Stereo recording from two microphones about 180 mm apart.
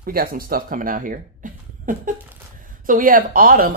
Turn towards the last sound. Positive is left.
turn(degrees=-55)  # may be behind; listen again after turning